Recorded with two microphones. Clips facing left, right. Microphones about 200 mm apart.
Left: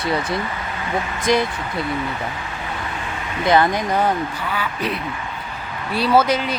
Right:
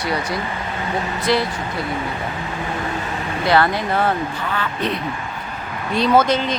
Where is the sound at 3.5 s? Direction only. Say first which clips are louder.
Left 1 dB; 15° left (ahead or behind).